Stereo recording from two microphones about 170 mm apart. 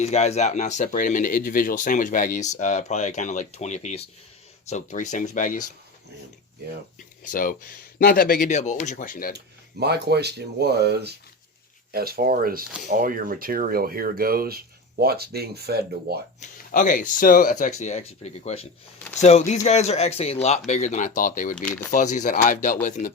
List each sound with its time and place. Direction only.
0.0 s speech: 40° left (ahead or behind)
7.3 s a man's voice: 55° left (ahead or behind)
8.5 s speech: 45° left (ahead or behind)
9.8 s speech: 75° right (ahead or behind)
16.4 s speech: 50° left (ahead or behind)
21.5 s speech: 5° left (ahead or behind)
21.9 s speech: 45° left (ahead or behind)